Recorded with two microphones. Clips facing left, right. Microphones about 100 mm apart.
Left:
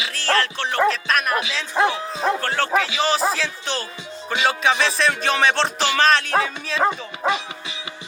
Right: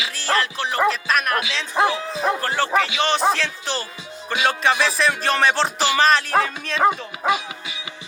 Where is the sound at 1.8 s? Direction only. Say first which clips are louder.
Even; 35° left (ahead or behind).